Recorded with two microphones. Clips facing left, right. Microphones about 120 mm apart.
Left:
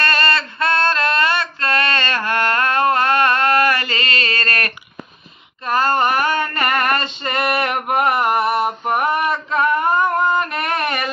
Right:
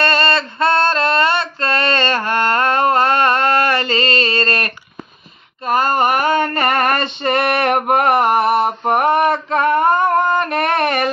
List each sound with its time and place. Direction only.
0.0 s female singing: 25° right (ahead or behind); by 11.1 s 55° right (ahead or behind)